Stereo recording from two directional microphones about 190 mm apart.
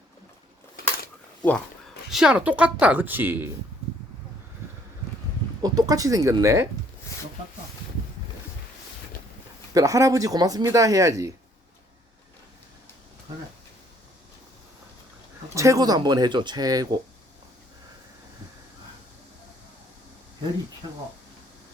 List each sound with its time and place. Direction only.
1.4 s speech: 5° left (ahead or behind); by 3.5 s 10° right (ahead or behind)
5.6 s speech: 20° right (ahead or behind)
9.7 s speech: 15° right (ahead or behind)
15.5 s speech: 15° right (ahead or behind)